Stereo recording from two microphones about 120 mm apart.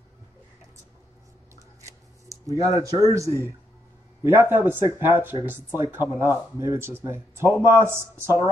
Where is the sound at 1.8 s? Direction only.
25° right (ahead or behind).